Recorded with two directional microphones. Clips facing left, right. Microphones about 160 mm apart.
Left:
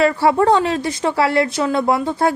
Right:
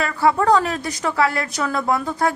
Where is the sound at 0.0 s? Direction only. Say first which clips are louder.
Left 4 dB; 30° left (ahead or behind).